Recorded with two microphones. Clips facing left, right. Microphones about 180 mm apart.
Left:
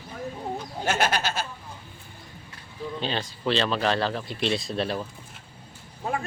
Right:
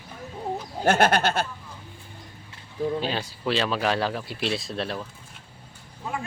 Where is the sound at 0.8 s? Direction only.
55° right (ahead or behind).